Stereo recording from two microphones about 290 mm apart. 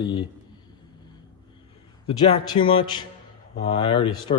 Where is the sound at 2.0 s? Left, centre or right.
Centre.